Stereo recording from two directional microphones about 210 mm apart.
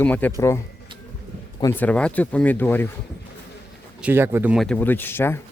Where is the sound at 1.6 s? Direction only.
10° left (ahead or behind).